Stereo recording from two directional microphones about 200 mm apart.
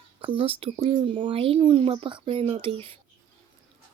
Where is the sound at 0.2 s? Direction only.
25° right (ahead or behind).